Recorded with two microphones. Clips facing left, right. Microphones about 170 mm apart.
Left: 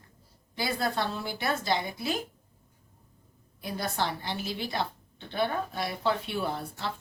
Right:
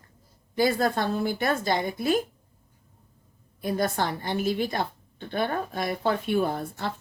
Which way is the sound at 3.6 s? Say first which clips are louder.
Right 5 dB; 50° right (ahead or behind).